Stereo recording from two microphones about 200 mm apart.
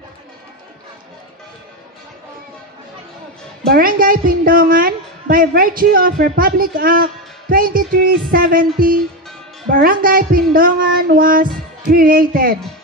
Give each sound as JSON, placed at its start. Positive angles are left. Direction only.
{"t": 3.6, "sound": "a woman's voice", "side_deg": -45}